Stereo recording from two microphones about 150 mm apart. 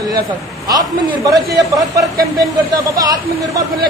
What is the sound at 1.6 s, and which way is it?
Speech, 20° right (ahead or behind).